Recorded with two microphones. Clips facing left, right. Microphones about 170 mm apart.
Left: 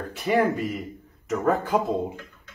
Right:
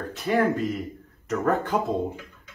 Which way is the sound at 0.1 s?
10° left (ahead or behind).